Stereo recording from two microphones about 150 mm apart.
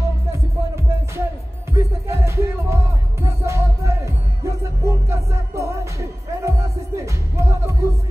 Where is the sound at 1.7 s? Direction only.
20° right (ahead or behind).